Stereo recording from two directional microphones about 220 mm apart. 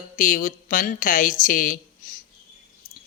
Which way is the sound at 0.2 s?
40° left (ahead or behind).